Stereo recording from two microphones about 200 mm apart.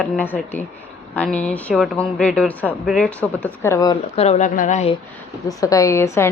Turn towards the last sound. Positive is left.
turn(degrees=15)  # may be behind; listen again after turning